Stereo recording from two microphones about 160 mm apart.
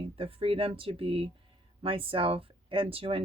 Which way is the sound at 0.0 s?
35° right (ahead or behind).